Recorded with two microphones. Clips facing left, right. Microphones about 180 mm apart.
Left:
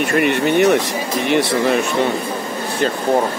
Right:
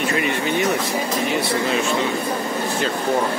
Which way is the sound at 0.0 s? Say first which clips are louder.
Left 5 dB; 65° left (ahead or behind).